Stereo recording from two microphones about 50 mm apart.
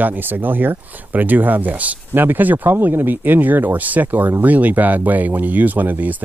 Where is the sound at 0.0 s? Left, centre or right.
Right.